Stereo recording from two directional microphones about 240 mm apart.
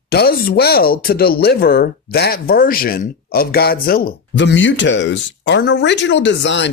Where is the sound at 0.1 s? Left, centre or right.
Left.